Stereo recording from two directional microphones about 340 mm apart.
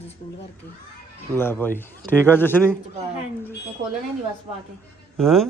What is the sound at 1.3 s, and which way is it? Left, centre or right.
A man's voice, centre.